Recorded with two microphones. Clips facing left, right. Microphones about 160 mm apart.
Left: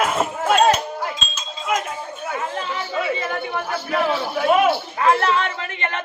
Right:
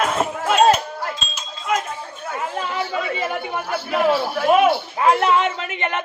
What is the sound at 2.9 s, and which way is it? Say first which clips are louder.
Chatter: even; 10° right (ahead or behind).